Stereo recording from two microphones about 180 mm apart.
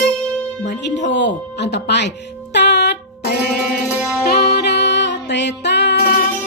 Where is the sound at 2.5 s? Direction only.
70° left (ahead or behind).